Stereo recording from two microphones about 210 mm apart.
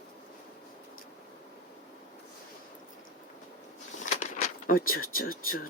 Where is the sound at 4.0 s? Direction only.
35° left (ahead or behind).